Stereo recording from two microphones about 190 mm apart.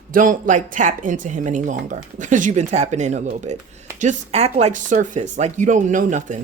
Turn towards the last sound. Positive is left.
turn(degrees=-40)  # may be behind; listen again after turning